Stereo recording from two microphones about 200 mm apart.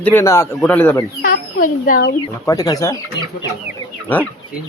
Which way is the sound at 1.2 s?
45° left (ahead or behind).